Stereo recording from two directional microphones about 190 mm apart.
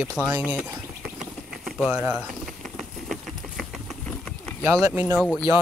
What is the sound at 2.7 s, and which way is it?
Mechanisms, centre (ahead or behind).